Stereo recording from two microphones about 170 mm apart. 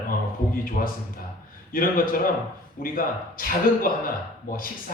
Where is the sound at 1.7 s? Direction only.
55° left (ahead or behind).